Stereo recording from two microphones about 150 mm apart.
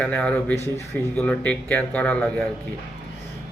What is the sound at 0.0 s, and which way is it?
Speech, 10° left (ahead or behind).